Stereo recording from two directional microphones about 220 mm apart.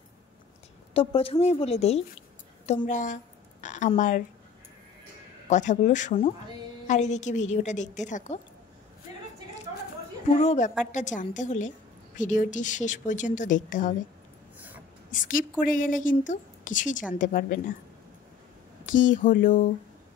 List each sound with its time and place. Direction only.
0.9 s a woman's voice: 25° left (ahead or behind)
5.5 s a woman's voice: 35° left (ahead or behind)
10.4 s a woman's voice: 30° left (ahead or behind)
15.0 s a woman's voice: 35° left (ahead or behind)
18.9 s a woman's voice: 35° left (ahead or behind)